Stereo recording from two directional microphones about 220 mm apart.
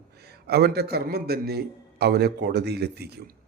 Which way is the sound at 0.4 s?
45° right (ahead or behind).